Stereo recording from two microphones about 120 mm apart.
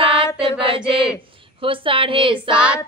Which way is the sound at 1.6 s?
45° right (ahead or behind).